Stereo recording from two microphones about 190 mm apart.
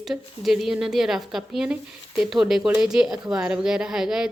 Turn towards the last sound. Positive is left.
turn(degrees=0)  # may be behind; listen again after turning